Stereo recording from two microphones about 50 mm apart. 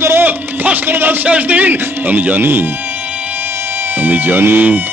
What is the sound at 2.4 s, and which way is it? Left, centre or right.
Speech, right.